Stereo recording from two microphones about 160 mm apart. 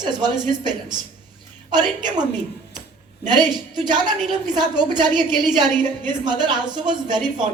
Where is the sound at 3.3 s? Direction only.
25° right (ahead or behind).